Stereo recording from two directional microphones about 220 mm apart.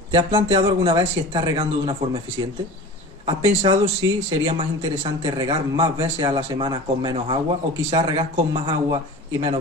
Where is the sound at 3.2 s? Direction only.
25° right (ahead or behind).